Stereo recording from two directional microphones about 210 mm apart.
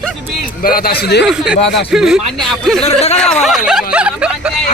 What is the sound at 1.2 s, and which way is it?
Speech, 5° right (ahead or behind).